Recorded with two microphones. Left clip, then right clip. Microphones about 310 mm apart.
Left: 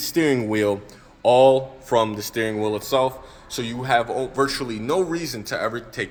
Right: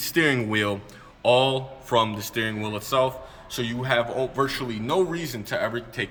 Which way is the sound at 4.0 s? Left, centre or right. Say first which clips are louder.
Left 2 dB; centre.